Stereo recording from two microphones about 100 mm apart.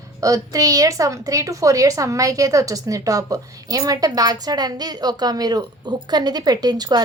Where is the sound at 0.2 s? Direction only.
35° right (ahead or behind).